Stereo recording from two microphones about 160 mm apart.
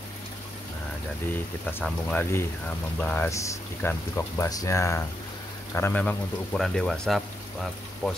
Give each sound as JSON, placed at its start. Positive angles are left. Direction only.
{"t": 1.3, "sound": "speech", "side_deg": 10}